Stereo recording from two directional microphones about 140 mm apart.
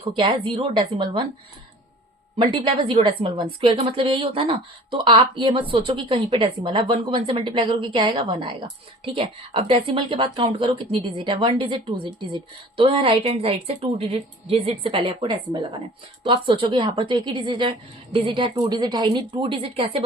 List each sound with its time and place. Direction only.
0.1 s speech: 35° right (ahead or behind)
2.4 s speech: 35° right (ahead or behind)